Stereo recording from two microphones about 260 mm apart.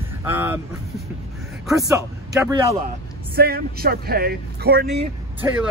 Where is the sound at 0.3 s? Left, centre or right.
Centre.